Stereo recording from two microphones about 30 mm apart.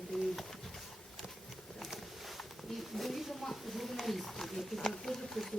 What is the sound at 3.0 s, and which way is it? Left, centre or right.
Speech, centre.